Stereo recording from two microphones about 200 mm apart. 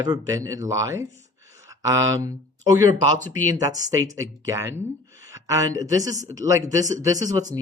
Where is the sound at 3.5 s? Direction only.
15° right (ahead or behind).